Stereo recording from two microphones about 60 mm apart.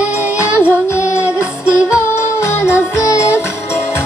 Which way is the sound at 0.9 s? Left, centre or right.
Left.